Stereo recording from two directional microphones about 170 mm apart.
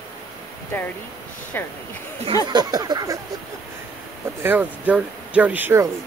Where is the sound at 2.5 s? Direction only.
25° right (ahead or behind).